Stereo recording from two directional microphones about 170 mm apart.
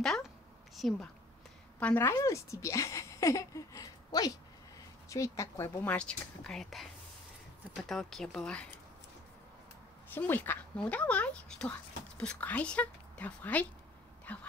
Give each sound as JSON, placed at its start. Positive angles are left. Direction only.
{"t": 0.0, "sound": "a sound", "side_deg": 0}
{"t": 0.7, "sound": "a woman's voice", "side_deg": 0}
{"t": 10.1, "sound": "a woman's voice", "side_deg": 10}